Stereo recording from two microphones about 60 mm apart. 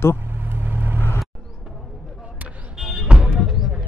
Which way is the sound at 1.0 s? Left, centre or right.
Left.